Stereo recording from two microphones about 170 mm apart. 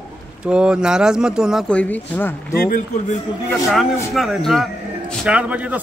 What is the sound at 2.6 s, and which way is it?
Speech, 50° left (ahead or behind).